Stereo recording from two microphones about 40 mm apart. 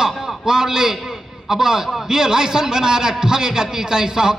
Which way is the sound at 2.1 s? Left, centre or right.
Centre.